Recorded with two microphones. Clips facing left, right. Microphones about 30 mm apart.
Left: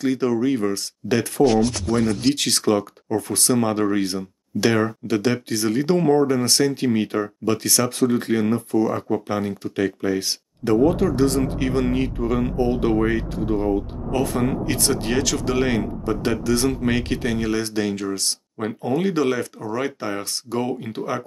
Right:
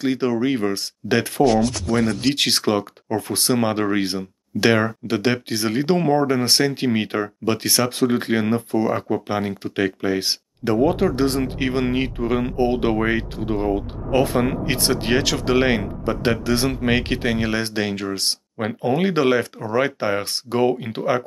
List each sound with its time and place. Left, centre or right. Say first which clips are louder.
0.0 s speech: even; right
1.6 s speech: even; centre
2.0 s speech: even; centre
2.3 s speech: right 1 dB; right